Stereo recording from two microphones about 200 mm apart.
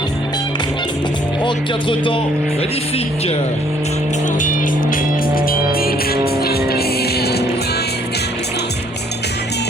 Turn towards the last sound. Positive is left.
turn(degrees=55)  # may be behind; listen again after turning